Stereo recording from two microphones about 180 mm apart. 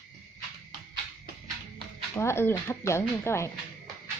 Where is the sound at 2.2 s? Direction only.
15° left (ahead or behind).